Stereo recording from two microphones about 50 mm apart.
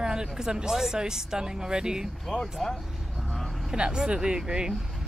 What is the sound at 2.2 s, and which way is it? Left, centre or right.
Speech, centre.